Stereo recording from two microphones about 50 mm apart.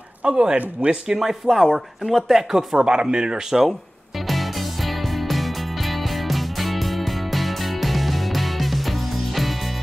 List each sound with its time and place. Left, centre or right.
0.2 s speech: centre
1.2 s speech: centre
4.3 s music: centre